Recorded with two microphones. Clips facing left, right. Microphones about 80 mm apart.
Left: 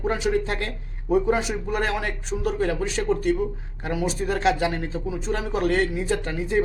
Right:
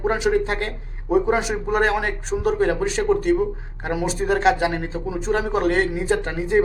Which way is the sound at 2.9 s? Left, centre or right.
Right.